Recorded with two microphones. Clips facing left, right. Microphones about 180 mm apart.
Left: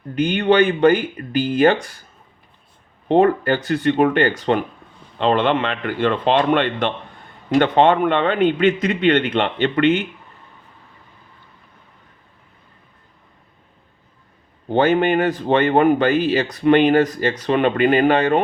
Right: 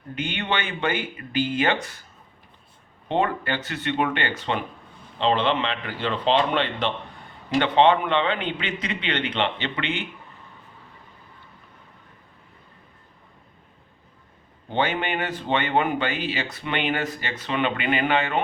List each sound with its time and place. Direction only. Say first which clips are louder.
0.2 s speech: left 13 dB; 40° left (ahead or behind)
3.1 s a man's voice: left 9 dB; 40° left (ahead or behind)
14.7 s a man's voice: left 9 dB; 45° left (ahead or behind)